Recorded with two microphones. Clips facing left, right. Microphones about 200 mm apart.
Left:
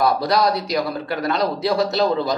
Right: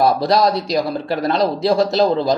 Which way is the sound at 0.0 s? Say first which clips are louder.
Right 3 dB; 25° right (ahead or behind).